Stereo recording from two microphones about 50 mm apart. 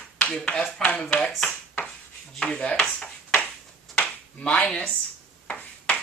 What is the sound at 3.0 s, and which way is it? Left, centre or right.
Ping, centre.